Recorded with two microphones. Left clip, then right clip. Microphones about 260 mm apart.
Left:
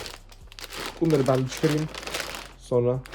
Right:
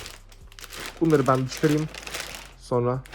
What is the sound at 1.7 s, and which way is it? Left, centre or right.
Crumpling, centre.